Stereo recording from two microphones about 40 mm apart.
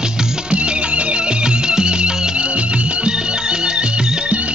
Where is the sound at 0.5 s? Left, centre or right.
Right.